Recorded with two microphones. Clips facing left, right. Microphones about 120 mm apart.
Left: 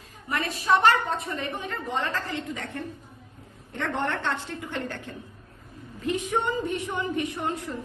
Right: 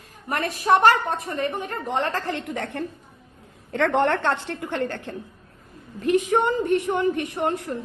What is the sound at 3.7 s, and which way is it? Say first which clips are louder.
A woman's voice: right 8 dB; 90° right.